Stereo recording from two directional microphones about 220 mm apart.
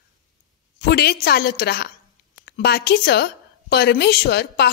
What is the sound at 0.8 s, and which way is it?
A woman's voice, 45° left (ahead or behind).